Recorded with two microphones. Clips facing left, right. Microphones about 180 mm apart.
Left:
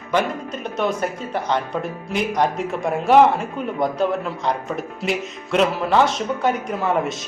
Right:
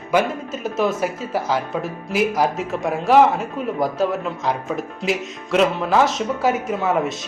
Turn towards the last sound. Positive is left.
turn(degrees=0)  # may be behind; listen again after turning